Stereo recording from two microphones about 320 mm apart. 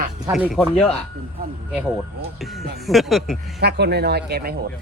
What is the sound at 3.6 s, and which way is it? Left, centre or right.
Speech, right.